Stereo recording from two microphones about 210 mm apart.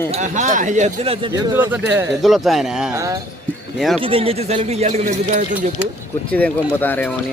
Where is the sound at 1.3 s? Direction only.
10° right (ahead or behind).